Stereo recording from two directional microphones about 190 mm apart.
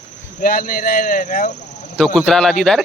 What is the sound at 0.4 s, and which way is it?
Speech, 45° left (ahead or behind).